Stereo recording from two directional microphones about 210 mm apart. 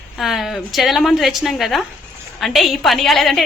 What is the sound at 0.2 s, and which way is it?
A woman's voice, centre (ahead or behind).